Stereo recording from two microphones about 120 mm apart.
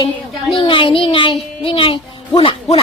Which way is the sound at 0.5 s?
45° left (ahead or behind).